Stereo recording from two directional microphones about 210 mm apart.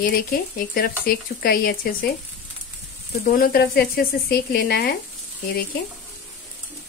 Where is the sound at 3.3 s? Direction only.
45° left (ahead or behind).